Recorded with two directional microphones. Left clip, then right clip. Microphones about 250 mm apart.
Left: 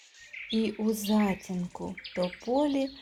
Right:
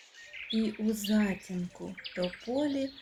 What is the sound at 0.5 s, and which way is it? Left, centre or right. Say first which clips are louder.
Speech: left 4 dB; centre.